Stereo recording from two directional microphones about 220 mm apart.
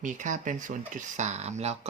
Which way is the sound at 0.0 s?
35° right (ahead or behind).